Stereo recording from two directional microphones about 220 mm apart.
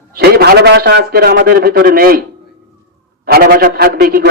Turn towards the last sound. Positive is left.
turn(degrees=-45)  # may be behind; listen again after turning